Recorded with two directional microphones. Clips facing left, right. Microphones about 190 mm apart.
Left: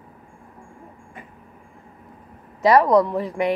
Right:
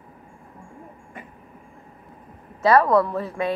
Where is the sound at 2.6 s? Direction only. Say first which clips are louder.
Left 2 dB; 15° left (ahead or behind).